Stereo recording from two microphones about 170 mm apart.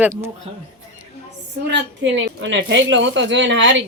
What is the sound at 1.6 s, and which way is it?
A woman's voice, 90° right.